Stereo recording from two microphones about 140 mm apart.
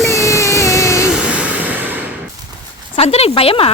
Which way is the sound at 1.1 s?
10° right (ahead or behind).